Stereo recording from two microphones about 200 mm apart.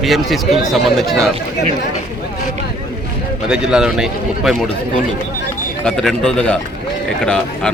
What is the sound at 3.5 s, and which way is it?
A man's voice, 5° right (ahead or behind).